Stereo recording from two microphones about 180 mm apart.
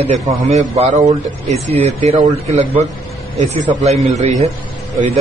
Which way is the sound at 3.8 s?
35° right (ahead or behind).